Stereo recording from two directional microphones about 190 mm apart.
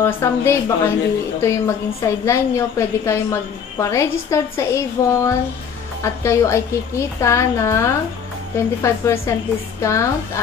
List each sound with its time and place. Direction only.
0.0 s a woman's voice: 15° left (ahead or behind)